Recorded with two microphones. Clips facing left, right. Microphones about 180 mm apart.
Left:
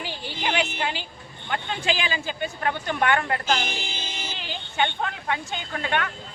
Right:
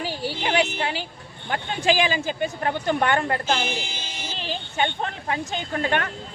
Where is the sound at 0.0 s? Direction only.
40° right (ahead or behind).